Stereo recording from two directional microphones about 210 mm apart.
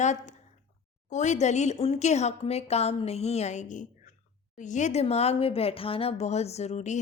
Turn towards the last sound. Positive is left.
turn(degrees=35)  # may be behind; listen again after turning